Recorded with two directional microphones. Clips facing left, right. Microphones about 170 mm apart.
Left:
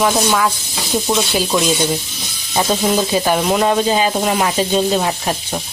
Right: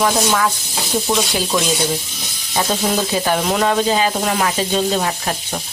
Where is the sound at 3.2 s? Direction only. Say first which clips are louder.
Left 1 dB; 15° left (ahead or behind).